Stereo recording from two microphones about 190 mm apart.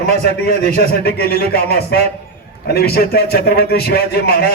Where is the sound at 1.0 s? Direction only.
55° left (ahead or behind).